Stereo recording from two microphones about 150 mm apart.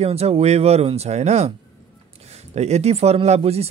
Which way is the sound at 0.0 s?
45° right (ahead or behind).